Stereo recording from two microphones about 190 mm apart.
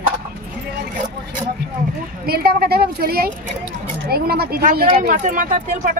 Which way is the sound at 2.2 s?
55° right (ahead or behind).